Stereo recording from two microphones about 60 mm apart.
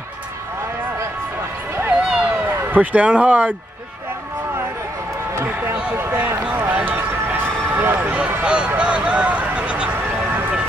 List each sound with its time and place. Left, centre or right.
1.9 s a sound: centre
2.3 s speech: right
5.5 s speech: right
6.7 s a sound: right
8.5 s speech: centre
10.0 s vehicle: right